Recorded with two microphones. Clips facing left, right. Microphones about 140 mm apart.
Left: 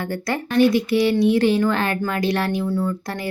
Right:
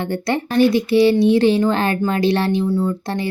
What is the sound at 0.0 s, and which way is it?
Speech, 25° right (ahead or behind).